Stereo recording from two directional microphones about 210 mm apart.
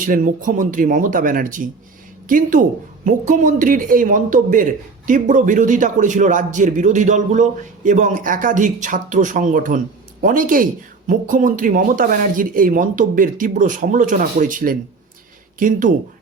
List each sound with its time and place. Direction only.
0.0 s speech: 40° right (ahead or behind)